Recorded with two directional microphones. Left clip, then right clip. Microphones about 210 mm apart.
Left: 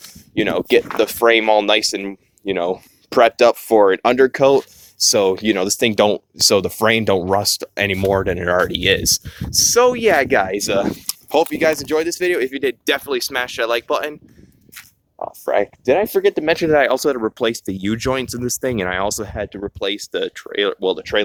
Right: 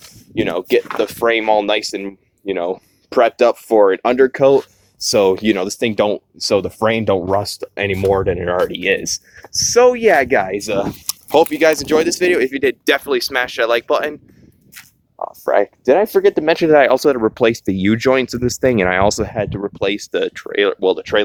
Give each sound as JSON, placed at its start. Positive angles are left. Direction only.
{"t": 0.0, "sound": "a sound", "side_deg": 30}
{"t": 0.5, "sound": "speech", "side_deg": 55}
{"t": 5.2, "sound": "speech", "side_deg": 0}
{"t": 5.6, "sound": "speech", "side_deg": 55}
{"t": 9.2, "sound": "speech", "side_deg": 15}
{"t": 10.4, "sound": "speech", "side_deg": 50}
{"t": 11.0, "sound": "speech", "side_deg": -5}
{"t": 19.8, "sound": "speech", "side_deg": -25}